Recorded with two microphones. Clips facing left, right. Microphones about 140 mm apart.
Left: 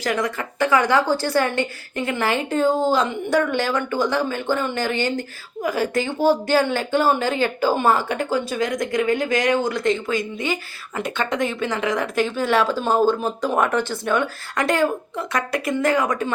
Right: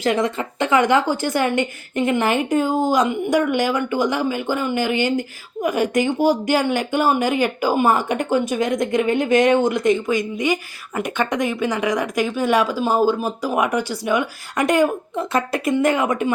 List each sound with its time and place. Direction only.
0.0 s speech: 25° right (ahead or behind)